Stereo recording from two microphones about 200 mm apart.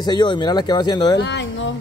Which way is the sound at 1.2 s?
60° left (ahead or behind).